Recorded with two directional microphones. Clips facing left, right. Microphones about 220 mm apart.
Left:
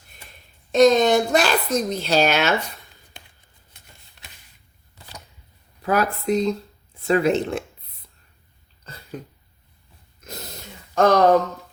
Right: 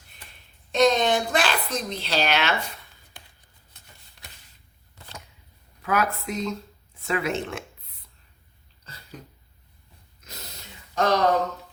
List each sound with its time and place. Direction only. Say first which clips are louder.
0.7 s speech: left 5 dB; 40° left (ahead or behind)
5.8 s speech: left 4 dB; 35° left (ahead or behind)
10.2 s a sound: left 8 dB; 50° left (ahead or behind)
10.9 s speech: left 6 dB; 50° left (ahead or behind)